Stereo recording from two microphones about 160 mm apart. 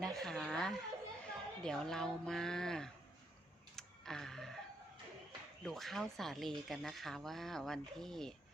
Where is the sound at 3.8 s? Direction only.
5° left (ahead or behind).